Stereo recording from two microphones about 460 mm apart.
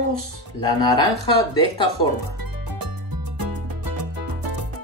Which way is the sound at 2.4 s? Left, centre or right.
Right.